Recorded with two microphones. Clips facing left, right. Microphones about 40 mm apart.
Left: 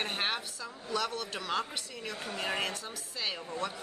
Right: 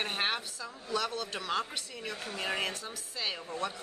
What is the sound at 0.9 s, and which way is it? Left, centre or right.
Speech, centre.